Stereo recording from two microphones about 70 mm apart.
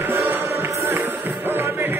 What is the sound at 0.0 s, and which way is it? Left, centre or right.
Music, right.